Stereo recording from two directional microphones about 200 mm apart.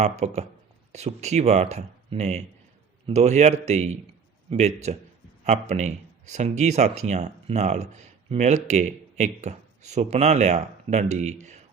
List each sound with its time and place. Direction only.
0.0 s speech: 35° right (ahead or behind)